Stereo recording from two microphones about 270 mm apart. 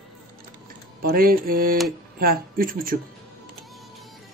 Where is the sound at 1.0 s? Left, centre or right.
Right.